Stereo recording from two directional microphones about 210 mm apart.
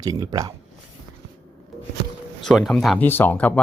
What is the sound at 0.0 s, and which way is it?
Speech, 15° right (ahead or behind).